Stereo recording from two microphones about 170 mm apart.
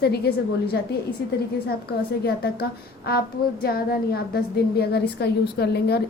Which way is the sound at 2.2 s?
65° left (ahead or behind).